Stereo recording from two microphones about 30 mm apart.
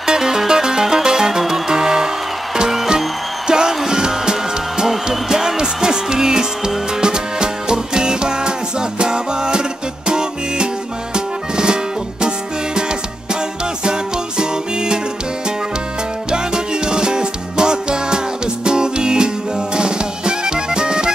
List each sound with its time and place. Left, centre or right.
0.0 s music: centre
3.4 s music: right
13.8 s music: right
16.3 s music: right